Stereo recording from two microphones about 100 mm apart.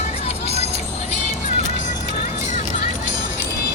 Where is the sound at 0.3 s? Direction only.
90° left.